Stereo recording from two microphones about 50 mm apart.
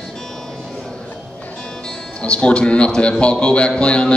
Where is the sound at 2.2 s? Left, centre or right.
Left.